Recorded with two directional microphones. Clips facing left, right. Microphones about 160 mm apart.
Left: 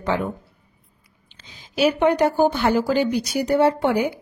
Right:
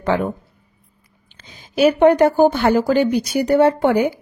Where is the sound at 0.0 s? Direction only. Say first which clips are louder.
Right 4 dB; 55° right (ahead or behind).